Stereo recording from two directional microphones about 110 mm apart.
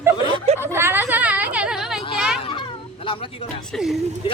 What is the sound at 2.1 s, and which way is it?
Children playing, 5° right (ahead or behind).